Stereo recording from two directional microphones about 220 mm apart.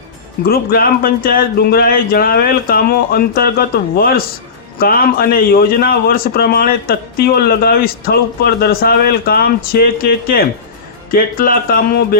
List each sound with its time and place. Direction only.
0.4 s a man's voice: 45° left (ahead or behind)